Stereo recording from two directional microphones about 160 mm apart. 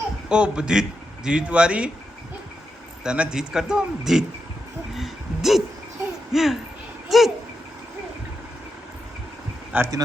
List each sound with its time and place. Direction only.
0.3 s a man's voice: 5° right (ahead or behind)
3.0 s a man's voice: 5° right (ahead or behind)
4.9 s a sound: centre (ahead or behind)
6.3 s a man's voice: centre (ahead or behind)
9.7 s speech: 15° right (ahead or behind)